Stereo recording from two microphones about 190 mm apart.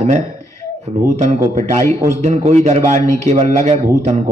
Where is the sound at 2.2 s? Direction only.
35° right (ahead or behind).